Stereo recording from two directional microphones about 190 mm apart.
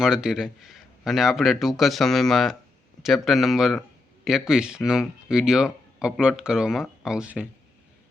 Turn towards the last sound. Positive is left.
turn(degrees=-5)  # may be behind; listen again after turning